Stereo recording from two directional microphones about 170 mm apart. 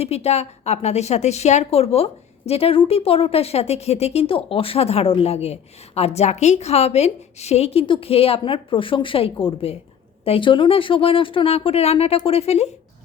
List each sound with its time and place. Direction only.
0.0 s speech: 40° left (ahead or behind)